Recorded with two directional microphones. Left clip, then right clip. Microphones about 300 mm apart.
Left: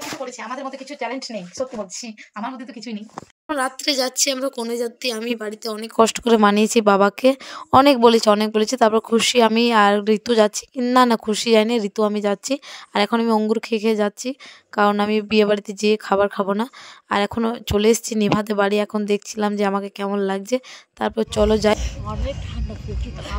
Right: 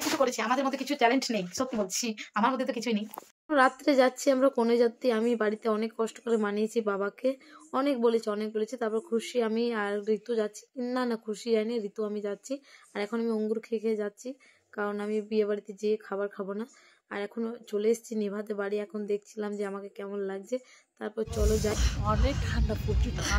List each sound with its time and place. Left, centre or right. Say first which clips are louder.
0.2 s speech: right 2 dB; centre
4.4 s speech: even; centre
5.9 s speech: left 14 dB; left
22.2 s speech: left 2 dB; centre